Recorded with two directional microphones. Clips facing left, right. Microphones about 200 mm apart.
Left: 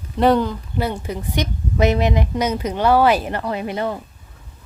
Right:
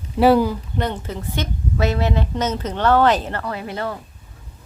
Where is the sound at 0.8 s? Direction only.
10° left (ahead or behind).